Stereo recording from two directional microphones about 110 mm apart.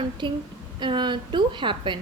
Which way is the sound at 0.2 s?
45° right (ahead or behind).